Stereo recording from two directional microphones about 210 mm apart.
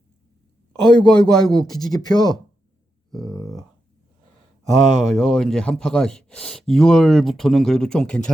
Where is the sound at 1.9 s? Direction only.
20° left (ahead or behind).